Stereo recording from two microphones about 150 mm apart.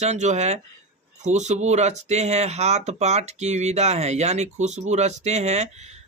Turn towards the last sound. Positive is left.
turn(degrees=-50)  # may be behind; listen again after turning